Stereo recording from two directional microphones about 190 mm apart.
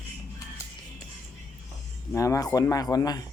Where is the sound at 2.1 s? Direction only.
15° left (ahead or behind).